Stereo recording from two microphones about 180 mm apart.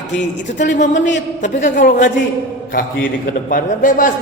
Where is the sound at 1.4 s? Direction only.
45° left (ahead or behind).